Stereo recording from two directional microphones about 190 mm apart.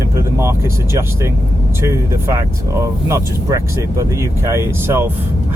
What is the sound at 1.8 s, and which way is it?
Speech, 15° right (ahead or behind).